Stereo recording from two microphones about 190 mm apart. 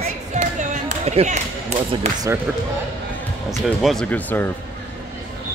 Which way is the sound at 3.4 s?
Centre (ahead or behind).